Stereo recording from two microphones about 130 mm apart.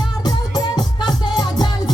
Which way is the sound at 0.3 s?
35° left (ahead or behind).